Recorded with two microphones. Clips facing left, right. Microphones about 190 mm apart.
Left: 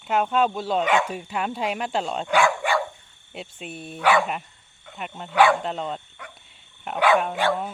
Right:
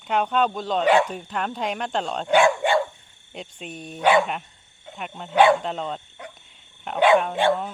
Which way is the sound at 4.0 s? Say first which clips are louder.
Right 2 dB; 25° right (ahead or behind).